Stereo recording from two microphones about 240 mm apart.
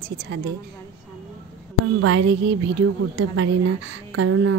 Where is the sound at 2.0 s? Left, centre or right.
Right.